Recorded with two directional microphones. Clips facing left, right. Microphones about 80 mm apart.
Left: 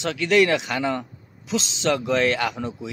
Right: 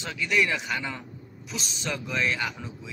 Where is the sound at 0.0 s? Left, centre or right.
Left.